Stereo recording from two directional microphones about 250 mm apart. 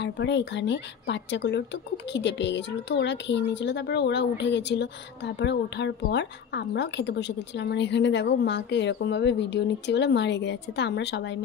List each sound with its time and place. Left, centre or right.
0.0 s speech: left